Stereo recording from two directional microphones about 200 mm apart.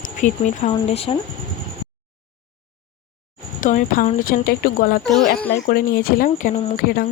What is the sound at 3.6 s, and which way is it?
Speech, 40° left (ahead or behind).